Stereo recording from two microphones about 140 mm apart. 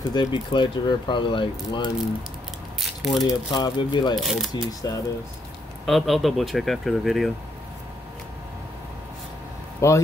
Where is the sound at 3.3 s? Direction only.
30° left (ahead or behind).